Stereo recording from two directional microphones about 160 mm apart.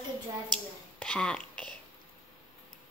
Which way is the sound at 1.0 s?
5° left (ahead or behind).